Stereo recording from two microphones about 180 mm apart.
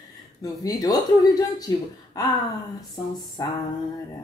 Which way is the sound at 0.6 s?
20° left (ahead or behind).